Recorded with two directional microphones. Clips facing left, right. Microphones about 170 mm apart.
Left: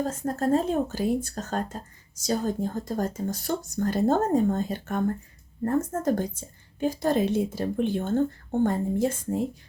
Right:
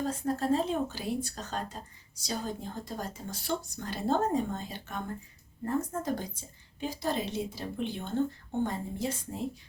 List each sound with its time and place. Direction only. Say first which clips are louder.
0.0 s speech: left 4 dB; 45° left (ahead or behind)